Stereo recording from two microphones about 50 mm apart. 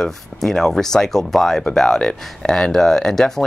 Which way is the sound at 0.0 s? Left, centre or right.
Centre.